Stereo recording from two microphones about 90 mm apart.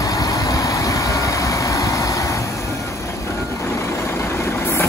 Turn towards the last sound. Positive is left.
turn(degrees=30)  # may be behind; listen again after turning